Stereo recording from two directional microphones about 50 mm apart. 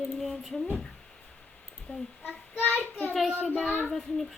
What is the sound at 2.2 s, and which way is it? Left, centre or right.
Child singing, left.